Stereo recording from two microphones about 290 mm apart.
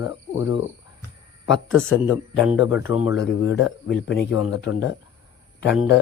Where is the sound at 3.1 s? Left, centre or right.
Left.